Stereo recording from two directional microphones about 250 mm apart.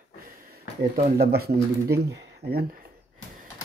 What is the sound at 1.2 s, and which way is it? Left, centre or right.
Speech, right.